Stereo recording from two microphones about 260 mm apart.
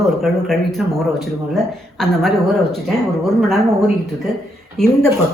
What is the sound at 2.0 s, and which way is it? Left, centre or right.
Speech, centre.